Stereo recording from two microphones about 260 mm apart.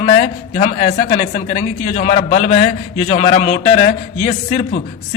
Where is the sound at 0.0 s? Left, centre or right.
Left.